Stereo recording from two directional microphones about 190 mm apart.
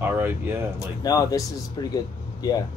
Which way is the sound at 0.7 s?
20° left (ahead or behind).